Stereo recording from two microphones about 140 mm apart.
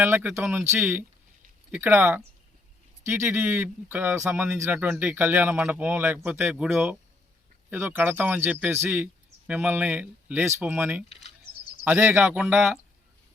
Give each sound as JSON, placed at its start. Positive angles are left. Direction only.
{"t": 0.0, "sound": "speech", "side_deg": -15}